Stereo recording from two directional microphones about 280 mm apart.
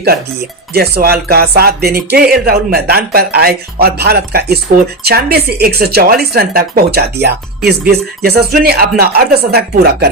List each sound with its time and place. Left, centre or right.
0.7 s speech: right